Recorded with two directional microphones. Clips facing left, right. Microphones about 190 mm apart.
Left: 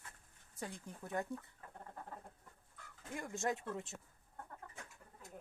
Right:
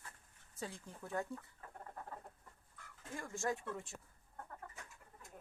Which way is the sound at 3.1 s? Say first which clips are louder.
Left 1 dB; 20° left (ahead or behind).